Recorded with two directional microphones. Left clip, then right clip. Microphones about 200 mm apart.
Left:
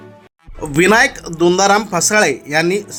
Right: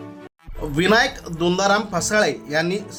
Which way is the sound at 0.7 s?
20° left (ahead or behind).